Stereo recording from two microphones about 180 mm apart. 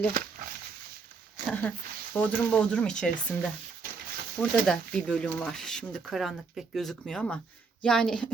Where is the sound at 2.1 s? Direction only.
5° left (ahead or behind).